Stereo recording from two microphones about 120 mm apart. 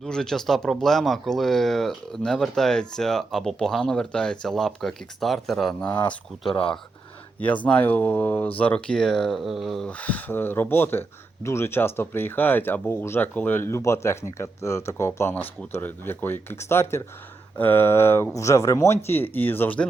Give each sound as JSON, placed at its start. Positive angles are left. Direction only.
{"t": 0.0, "sound": "speech", "side_deg": 5}
{"t": 10.0, "sound": "speech", "side_deg": 15}